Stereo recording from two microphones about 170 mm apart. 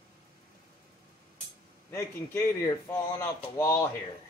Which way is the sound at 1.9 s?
15° left (ahead or behind).